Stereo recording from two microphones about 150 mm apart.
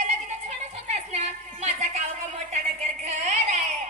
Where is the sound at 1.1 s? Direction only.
50° right (ahead or behind).